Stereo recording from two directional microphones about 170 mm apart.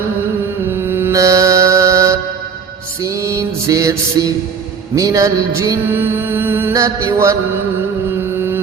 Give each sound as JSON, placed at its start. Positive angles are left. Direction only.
{"t": 0.7, "sound": "music", "side_deg": -15}